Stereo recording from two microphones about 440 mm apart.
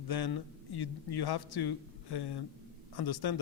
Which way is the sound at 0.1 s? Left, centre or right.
Left.